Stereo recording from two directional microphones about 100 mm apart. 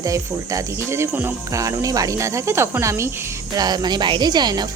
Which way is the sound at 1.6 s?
35° right (ahead or behind).